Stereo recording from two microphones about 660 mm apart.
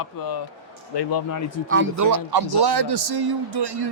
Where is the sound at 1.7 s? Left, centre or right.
Right.